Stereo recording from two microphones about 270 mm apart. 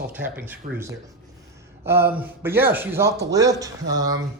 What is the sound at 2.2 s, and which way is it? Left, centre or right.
A man's voice, centre.